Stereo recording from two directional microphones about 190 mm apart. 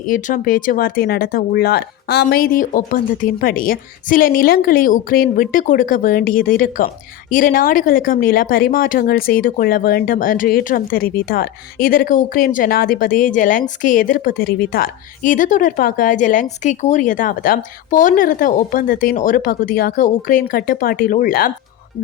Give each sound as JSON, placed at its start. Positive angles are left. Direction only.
{"t": 0.1, "sound": "speech", "side_deg": 45}